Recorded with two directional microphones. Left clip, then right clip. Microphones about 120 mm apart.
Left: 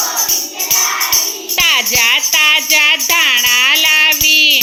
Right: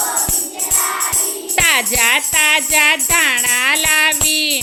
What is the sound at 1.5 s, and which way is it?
Jingle bell, 45° right (ahead or behind).